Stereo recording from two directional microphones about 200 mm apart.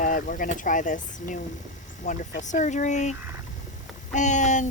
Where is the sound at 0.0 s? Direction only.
40° left (ahead or behind).